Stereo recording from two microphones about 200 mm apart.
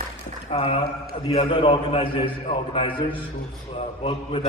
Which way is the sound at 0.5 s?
25° left (ahead or behind).